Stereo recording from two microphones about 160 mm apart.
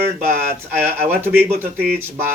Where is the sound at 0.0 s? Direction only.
15° right (ahead or behind).